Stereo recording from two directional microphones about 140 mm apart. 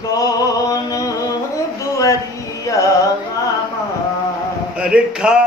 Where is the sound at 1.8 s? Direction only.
25° left (ahead or behind).